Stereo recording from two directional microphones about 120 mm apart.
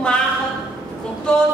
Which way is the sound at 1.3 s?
5° left (ahead or behind).